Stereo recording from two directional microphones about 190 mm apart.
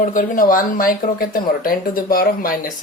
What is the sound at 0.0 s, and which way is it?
Speech, 45° left (ahead or behind).